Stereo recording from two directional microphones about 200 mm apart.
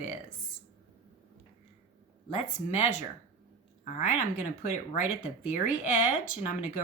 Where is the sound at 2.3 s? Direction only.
35° left (ahead or behind).